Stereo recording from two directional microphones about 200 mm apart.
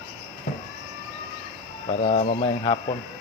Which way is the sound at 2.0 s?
35° left (ahead or behind).